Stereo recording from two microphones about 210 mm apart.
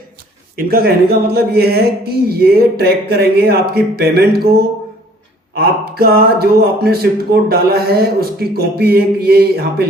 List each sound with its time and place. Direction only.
0.5 s speech: 45° right (ahead or behind)